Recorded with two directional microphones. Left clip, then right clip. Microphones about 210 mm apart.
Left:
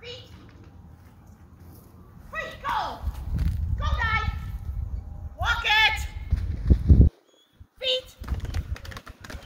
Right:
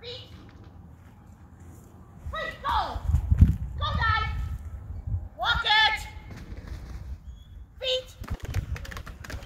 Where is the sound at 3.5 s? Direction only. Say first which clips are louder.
Left 2 dB; 10° left (ahead or behind).